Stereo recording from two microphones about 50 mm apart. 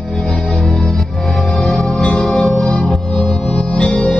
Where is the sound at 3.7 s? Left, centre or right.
Left.